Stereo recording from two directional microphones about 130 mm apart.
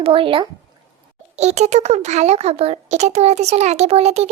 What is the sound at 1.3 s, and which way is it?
A child's voice, 60° right (ahead or behind).